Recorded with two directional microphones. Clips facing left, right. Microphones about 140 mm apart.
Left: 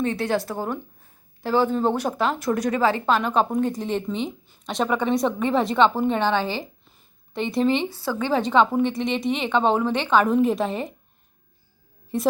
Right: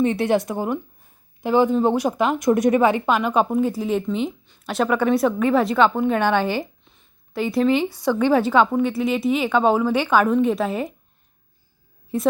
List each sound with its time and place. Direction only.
0.0 s a woman's voice: 20° right (ahead or behind); by 6.1 s centre (ahead or behind)
6.1 s a woman's voice: 15° right (ahead or behind)
6.8 s a sound: centre (ahead or behind)
7.9 s speech: 15° right (ahead or behind)
12.1 s speech: centre (ahead or behind)